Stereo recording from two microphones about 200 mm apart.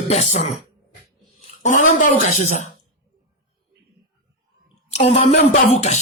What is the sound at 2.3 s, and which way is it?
Speech, 35° left (ahead or behind).